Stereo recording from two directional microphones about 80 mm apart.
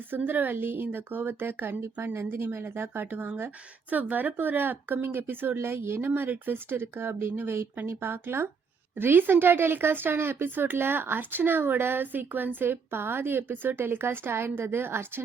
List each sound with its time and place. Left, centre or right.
0.2 s speech: right